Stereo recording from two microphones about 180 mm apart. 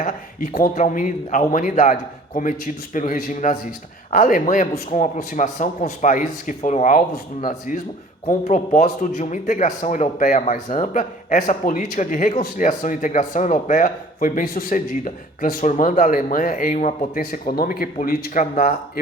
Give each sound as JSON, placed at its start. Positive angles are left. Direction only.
{"t": 0.0, "sound": "speech", "side_deg": 50}
{"t": 8.3, "sound": "speech", "side_deg": 45}